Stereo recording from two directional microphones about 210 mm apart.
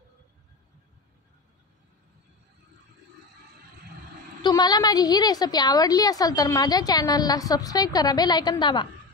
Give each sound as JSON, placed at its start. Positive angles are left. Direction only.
{"t": 4.4, "sound": "a woman's voice", "side_deg": 20}